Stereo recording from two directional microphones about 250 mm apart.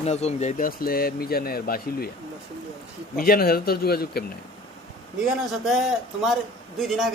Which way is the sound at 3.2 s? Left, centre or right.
Left.